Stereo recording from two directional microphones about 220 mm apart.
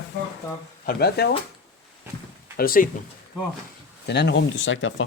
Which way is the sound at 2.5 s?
40° left (ahead or behind).